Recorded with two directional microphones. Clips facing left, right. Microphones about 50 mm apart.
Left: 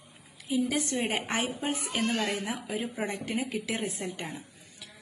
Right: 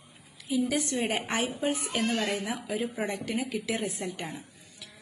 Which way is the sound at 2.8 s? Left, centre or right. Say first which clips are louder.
Right 2 dB; right.